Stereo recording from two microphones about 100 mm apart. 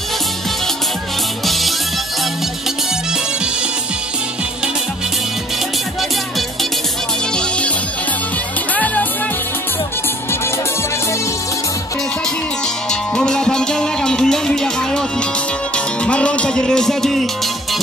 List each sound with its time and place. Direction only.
1.4 s music: centre (ahead or behind)
7.3 s music: 10° left (ahead or behind)
8.7 s music: 15° left (ahead or behind)
13.1 s music: 5° left (ahead or behind)